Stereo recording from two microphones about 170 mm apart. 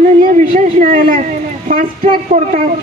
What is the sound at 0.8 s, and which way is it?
Speech, 50° right (ahead or behind).